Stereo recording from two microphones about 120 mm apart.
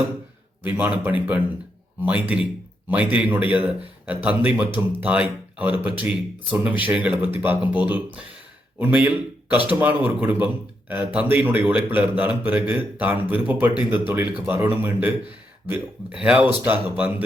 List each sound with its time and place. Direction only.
0.6 s a man's voice: 15° right (ahead or behind)
16.1 s a man's voice: 10° right (ahead or behind)